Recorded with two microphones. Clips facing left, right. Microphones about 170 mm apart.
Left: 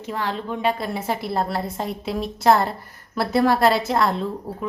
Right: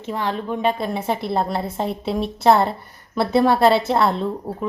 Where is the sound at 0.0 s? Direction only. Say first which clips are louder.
Right 2 dB; 20° right (ahead or behind).